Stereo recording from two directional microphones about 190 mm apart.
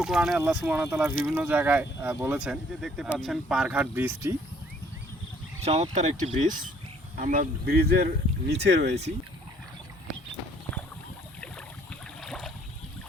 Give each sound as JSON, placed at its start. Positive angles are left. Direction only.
{"t": 0.0, "sound": "speech", "side_deg": 0}
{"t": 5.6, "sound": "speech", "side_deg": -35}
{"t": 12.2, "sound": "a sound", "side_deg": 5}